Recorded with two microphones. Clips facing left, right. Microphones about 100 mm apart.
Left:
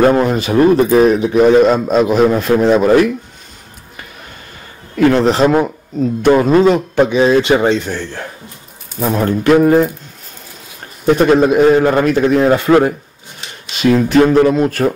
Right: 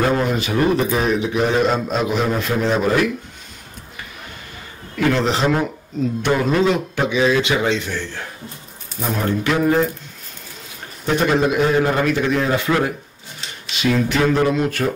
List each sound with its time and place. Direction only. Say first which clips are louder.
0.0 s speech: left 7 dB; 45° left (ahead or behind)
4.9 s a man's voice: left 7 dB; 45° left (ahead or behind)
11.1 s speech: left 6 dB; 45° left (ahead or behind)